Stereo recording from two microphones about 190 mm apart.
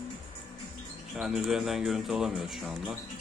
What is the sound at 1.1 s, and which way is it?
Speech, centre (ahead or behind).